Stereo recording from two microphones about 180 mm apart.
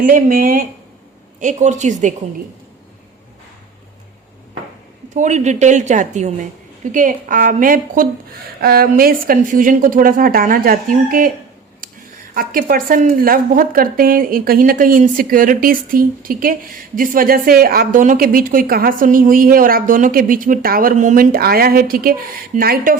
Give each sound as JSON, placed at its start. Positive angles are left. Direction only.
{"t": 0.0, "sound": "a woman's voice", "side_deg": -50}
{"t": 5.0, "sound": "a woman's voice", "side_deg": -45}
{"t": 12.3, "sound": "a woman's voice", "side_deg": -50}